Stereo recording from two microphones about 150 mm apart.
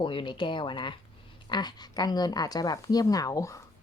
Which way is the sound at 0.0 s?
35° left (ahead or behind).